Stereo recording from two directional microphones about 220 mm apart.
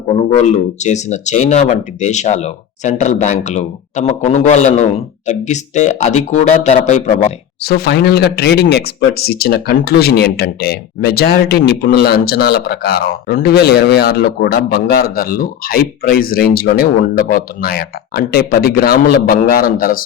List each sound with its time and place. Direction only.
0.4 s speech: 30° left (ahead or behind)
7.6 s speech: 45° left (ahead or behind)